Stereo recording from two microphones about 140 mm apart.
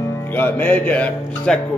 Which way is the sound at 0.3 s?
15° left (ahead or behind).